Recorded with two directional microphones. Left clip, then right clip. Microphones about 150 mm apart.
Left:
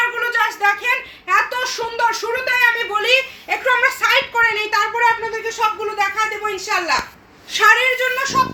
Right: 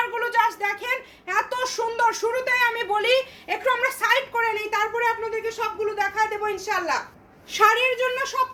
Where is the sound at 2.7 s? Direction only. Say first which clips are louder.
Left 4 dB; 30° right (ahead or behind).